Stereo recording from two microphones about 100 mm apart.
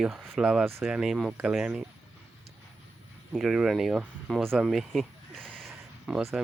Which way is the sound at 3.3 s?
5° right (ahead or behind).